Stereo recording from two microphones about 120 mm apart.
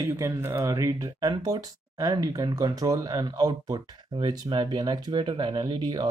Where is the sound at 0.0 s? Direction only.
25° right (ahead or behind).